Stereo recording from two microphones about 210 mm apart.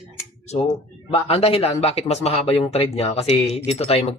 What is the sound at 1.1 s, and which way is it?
Speech, 30° left (ahead or behind).